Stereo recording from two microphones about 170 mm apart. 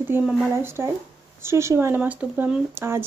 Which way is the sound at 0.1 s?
10° right (ahead or behind).